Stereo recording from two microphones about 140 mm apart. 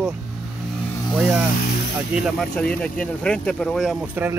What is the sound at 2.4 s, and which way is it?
Speech, 5° left (ahead or behind).